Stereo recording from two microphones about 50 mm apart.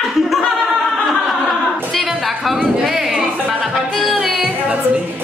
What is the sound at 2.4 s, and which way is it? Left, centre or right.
Speech, centre.